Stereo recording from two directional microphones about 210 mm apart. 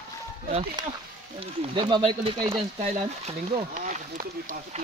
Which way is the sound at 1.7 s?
20° right (ahead or behind).